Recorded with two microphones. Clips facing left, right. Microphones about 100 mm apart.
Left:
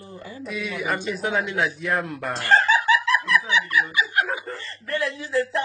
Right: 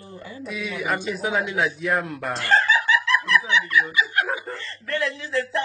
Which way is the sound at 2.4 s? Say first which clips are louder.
Left 1 dB; 45° left (ahead or behind).